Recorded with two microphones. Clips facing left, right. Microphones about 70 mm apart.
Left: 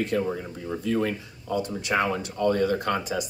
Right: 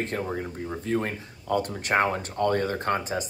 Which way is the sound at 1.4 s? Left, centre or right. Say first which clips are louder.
Right 1 dB; right.